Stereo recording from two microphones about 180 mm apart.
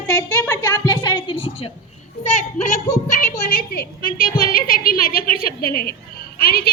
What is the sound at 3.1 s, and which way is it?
A woman's voice, 55° left (ahead or behind).